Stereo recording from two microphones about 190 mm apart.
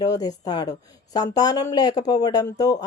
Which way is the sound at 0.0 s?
20° left (ahead or behind).